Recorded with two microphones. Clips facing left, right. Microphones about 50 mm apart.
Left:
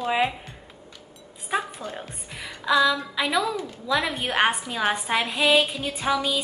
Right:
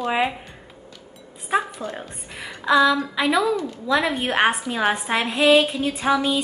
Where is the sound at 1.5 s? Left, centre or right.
Centre.